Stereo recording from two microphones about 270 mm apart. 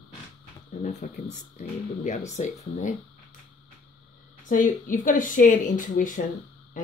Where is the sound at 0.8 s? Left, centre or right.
Left.